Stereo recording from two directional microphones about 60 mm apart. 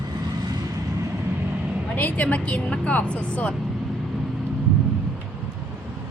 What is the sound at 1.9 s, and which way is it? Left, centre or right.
A woman's voice, left.